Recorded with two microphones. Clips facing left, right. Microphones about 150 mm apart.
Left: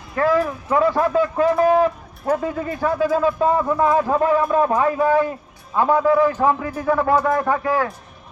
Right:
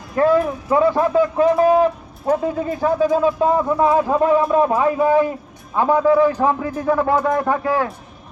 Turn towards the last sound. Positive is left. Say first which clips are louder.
# right 1 dB
turn(degrees=-20)  # may be behind; listen again after turning